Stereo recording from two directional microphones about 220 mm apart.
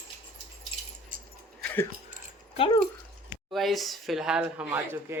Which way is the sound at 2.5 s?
20° left (ahead or behind).